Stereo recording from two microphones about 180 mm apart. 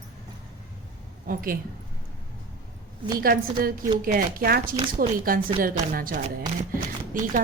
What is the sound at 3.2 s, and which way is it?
A woman's voice, 55° right (ahead or behind).